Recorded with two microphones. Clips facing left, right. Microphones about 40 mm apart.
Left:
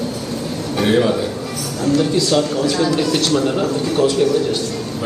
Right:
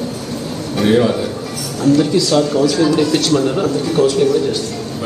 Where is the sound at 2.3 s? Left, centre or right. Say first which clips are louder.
Right 5 dB; right.